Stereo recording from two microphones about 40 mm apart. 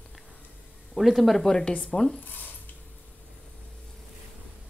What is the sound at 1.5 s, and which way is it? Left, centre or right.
Speech, centre.